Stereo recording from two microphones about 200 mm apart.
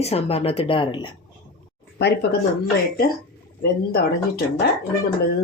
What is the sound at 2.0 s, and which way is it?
Speech, 55° left (ahead or behind).